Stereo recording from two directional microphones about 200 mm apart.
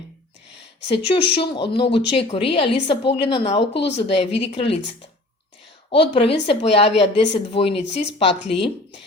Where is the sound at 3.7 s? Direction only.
60° left (ahead or behind).